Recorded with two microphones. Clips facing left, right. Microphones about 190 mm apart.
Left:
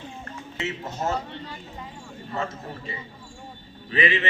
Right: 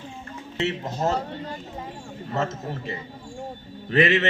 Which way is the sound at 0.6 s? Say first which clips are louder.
Right 4 dB; 35° right (ahead or behind).